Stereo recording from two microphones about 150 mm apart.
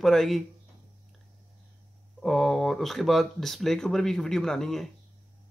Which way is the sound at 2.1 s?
Centre (ahead or behind).